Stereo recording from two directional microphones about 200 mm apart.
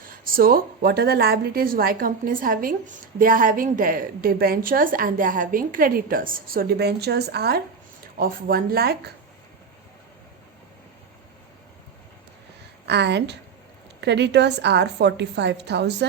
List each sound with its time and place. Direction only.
0.0 s a woman's voice: 45° right (ahead or behind)
12.8 s a woman's voice: 55° right (ahead or behind)